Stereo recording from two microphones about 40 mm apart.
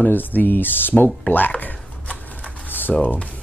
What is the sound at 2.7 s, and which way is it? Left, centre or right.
Typing, left.